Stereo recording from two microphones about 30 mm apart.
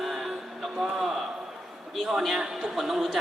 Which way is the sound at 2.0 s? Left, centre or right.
Centre.